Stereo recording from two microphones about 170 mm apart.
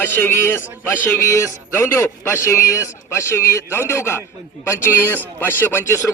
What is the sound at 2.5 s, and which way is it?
A man's voice, 20° left (ahead or behind).